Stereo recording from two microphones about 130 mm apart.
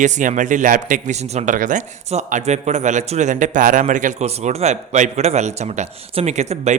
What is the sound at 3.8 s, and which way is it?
A man's voice, 75° right (ahead or behind).